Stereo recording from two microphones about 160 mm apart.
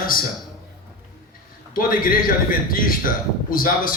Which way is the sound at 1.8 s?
60° left (ahead or behind).